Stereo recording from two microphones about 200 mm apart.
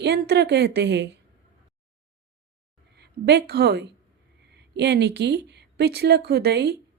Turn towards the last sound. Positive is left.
turn(degrees=-55)  # may be behind; listen again after turning